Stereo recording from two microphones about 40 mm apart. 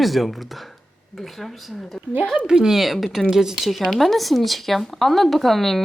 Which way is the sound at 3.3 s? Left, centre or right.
Centre.